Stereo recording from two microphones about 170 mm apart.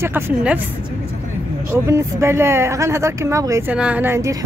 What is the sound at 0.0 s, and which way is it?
Speech, 10° right (ahead or behind).